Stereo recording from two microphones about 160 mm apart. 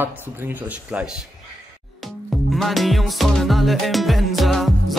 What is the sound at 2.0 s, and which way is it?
Music, centre (ahead or behind).